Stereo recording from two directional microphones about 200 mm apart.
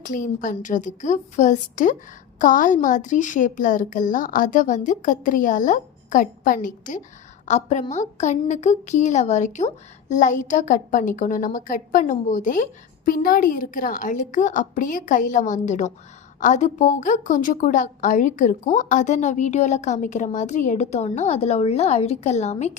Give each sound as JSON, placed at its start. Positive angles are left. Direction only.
{"t": 0.0, "sound": "a woman's voice", "side_deg": 40}